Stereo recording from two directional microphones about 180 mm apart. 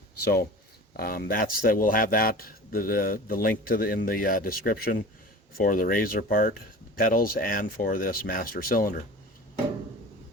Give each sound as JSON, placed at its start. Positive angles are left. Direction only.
{"t": 0.9, "sound": "speech", "side_deg": 55}